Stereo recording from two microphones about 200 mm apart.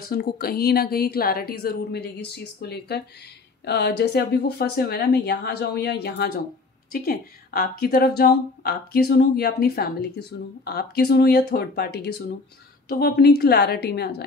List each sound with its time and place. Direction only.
0.1 s speech: 50° left (ahead or behind)